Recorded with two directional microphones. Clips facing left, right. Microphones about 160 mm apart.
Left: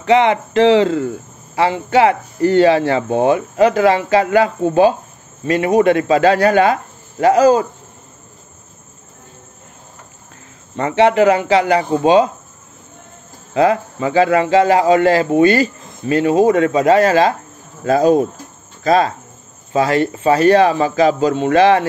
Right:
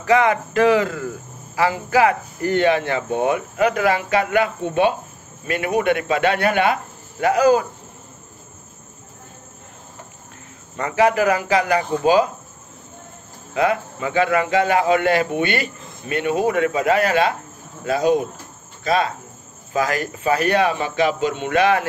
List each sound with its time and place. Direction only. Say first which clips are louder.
0.0 s speech: left 4 dB; 25° left (ahead or behind)
10.8 s speech: left 5 dB; 25° left (ahead or behind)
13.6 s speech: left 5 dB; 30° left (ahead or behind)
19.7 s speech: left 7 dB; 30° left (ahead or behind)